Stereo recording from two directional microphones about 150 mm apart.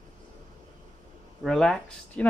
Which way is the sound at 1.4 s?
5° left (ahead or behind).